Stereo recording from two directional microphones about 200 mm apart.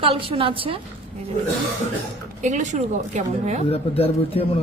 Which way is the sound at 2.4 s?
35° right (ahead or behind).